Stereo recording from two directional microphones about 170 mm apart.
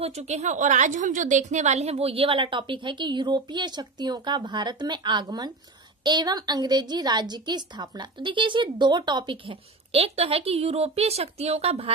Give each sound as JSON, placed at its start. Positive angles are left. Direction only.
{"t": 0.0, "sound": "a woman's voice", "side_deg": -40}